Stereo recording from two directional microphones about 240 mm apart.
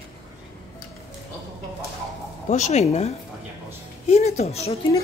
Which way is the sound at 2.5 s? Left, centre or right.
Left.